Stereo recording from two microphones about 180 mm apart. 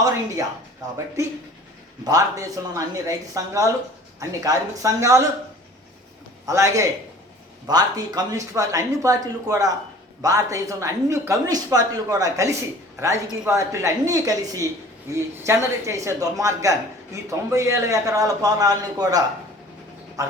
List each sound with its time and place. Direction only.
0.8 s speech: 20° right (ahead or behind)
2.0 s speech: 20° right (ahead or behind)
6.4 s a man's voice: 15° right (ahead or behind)